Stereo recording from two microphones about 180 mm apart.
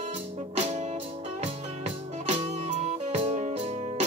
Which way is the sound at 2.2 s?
35° right (ahead or behind).